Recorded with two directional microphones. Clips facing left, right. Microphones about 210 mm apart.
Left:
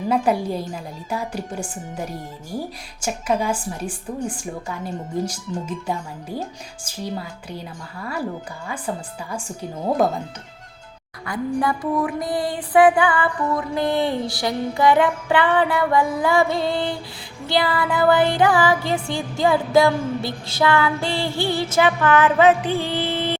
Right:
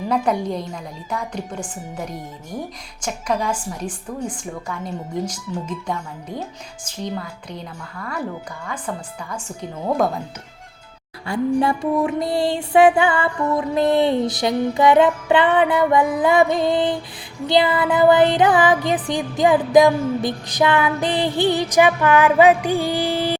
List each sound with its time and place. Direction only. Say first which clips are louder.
0.1 s speech: left 1 dB; 5° left (ahead or behind)
9.3 s speech: left 1 dB; 10° left (ahead or behind)
11.3 s music: right 4 dB; 25° right (ahead or behind)